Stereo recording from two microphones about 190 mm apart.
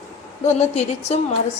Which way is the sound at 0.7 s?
35° left (ahead or behind).